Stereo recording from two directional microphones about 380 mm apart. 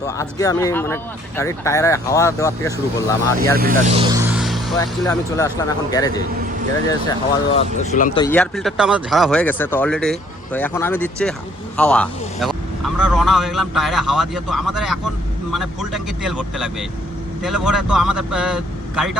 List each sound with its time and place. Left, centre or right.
0.0 s speech: centre
3.6 s vehicle: centre
4.8 s speech: centre
7.5 s a man's voice: centre